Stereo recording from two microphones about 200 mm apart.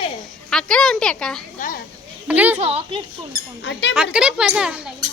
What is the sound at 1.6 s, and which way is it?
Speech, 45° left (ahead or behind).